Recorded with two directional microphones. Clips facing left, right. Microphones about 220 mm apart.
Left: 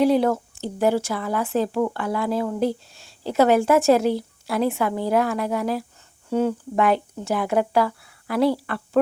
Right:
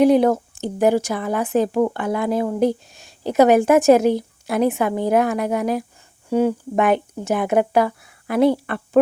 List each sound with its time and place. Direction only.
0.0 s a woman's voice: 20° right (ahead or behind)